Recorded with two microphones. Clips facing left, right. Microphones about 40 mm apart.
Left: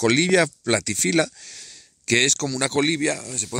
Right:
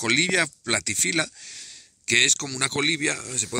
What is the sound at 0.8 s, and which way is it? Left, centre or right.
Speech, right.